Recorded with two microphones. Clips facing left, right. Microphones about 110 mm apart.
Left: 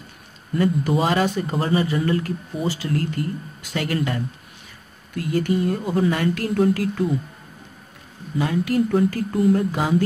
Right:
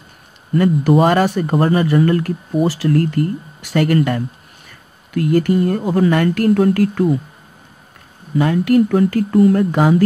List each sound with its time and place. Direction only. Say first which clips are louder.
0.6 s speech: right 7 dB; 60° right (ahead or behind)
5.1 s speech: right 7 dB; 65° right (ahead or behind)
8.4 s speech: right 7 dB; 70° right (ahead or behind)